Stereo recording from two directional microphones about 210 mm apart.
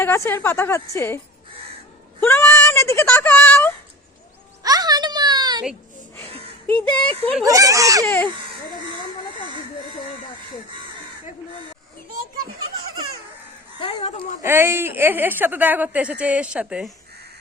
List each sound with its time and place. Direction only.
0.0 s a woman's voice: 10° left (ahead or behind)
2.2 s a sound: 10° left (ahead or behind)
4.6 s a sound: 20° right (ahead or behind)
6.7 s a woman's voice: 5° left (ahead or behind)
7.4 s a woman's voice: 15° right (ahead or behind)
8.0 s a woman's voice: 10° left (ahead or behind)
13.8 s speech: 30° left (ahead or behind)
14.4 s a woman's voice: 10° right (ahead or behind)